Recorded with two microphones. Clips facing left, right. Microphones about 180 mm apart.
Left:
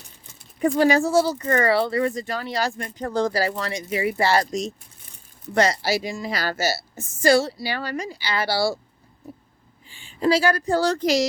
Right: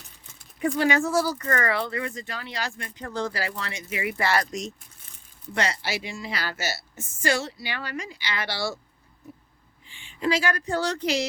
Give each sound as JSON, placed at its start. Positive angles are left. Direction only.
{"t": 0.6, "sound": "a woman's voice", "side_deg": 40}
{"t": 9.9, "sound": "a woman's voice", "side_deg": 35}